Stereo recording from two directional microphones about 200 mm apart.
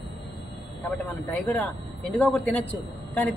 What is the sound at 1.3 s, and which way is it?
Speech, 5° left (ahead or behind).